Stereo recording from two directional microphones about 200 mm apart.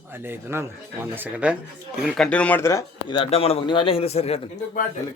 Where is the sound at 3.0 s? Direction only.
30° left (ahead or behind).